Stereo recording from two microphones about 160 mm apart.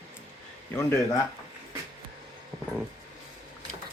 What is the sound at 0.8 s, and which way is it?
Speech, 15° left (ahead or behind).